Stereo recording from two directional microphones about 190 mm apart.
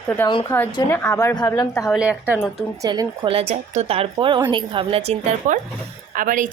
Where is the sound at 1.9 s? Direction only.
5° right (ahead or behind).